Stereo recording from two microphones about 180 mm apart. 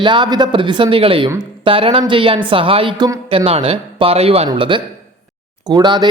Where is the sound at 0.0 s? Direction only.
25° right (ahead or behind).